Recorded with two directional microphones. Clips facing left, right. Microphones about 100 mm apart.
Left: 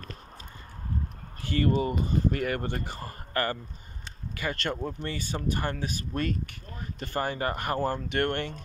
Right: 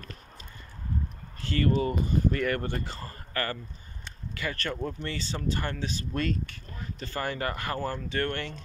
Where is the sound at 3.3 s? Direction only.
25° left (ahead or behind).